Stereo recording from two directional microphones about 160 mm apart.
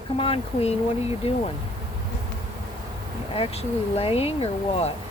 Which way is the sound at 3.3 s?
40° left (ahead or behind).